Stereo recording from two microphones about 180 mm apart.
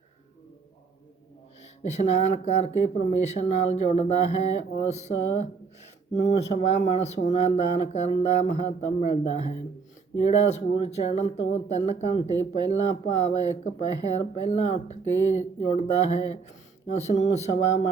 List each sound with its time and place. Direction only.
1.8 s speech: 40° left (ahead or behind)